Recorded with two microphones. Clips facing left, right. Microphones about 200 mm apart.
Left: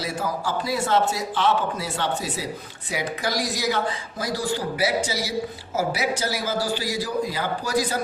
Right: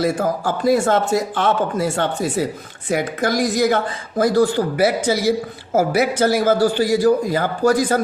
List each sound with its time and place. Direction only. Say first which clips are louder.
0.0 s speech: right 8 dB; 50° right (ahead or behind)